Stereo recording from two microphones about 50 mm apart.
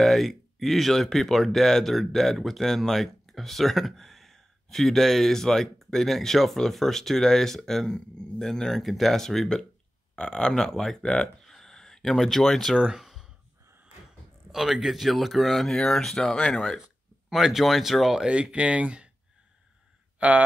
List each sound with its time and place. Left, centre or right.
0.0 s speech: centre
11.0 s speech: centre
11.4 s a sound: centre
12.7 s speech: centre
13.0 s a sound: centre
14.5 s speech: centre
16.3 s speech: left
17.3 s speech: centre
18.2 s speech: right
20.2 s speech: right